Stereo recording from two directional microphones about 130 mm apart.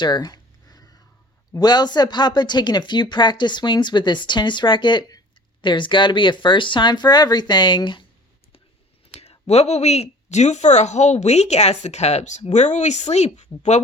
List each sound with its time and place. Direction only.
0.0 s a sound: 35° left (ahead or behind)
1.5 s speech: 35° left (ahead or behind)
9.2 s a woman's voice: 50° left (ahead or behind)